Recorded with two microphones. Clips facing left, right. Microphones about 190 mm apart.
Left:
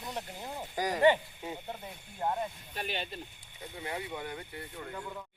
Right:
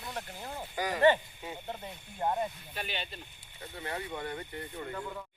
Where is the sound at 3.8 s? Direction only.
10° left (ahead or behind).